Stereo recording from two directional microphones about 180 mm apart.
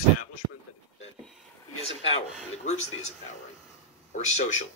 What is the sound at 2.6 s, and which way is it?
A man's voice, 40° left (ahead or behind).